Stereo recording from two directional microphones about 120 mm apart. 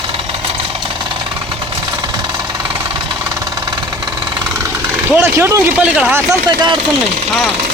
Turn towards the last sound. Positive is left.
turn(degrees=-10)  # may be behind; listen again after turning